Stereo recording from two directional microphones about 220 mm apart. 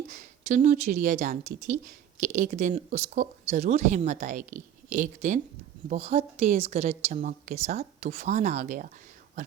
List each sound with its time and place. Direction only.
0.1 s speech: 35° right (ahead or behind)